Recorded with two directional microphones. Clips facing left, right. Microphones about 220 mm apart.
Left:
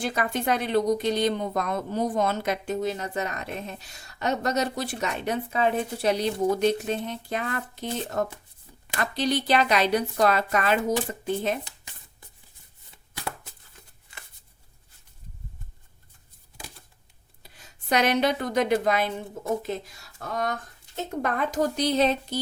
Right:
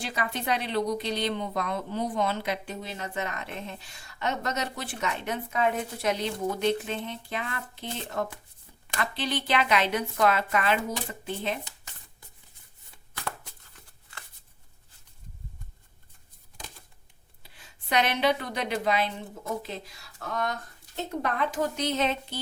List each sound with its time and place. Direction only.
0.0 s speech: 50° left (ahead or behind)
17.4 s a woman's voice: 40° left (ahead or behind)
21.2 s speech: 45° left (ahead or behind)